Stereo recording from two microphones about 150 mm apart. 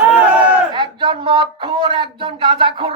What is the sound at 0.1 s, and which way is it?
Battle cry, 10° right (ahead or behind).